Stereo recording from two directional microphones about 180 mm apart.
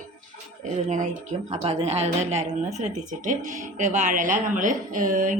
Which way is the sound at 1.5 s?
35° right (ahead or behind).